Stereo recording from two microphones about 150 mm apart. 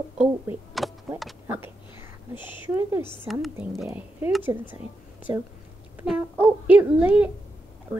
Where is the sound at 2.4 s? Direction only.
30° left (ahead or behind).